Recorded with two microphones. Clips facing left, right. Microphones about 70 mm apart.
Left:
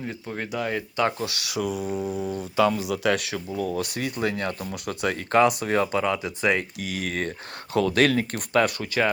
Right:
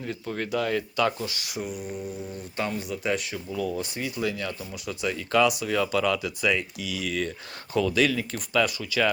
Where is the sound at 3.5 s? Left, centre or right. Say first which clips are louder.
Left 1 dB; left.